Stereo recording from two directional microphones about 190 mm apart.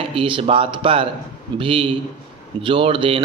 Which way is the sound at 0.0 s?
30° right (ahead or behind).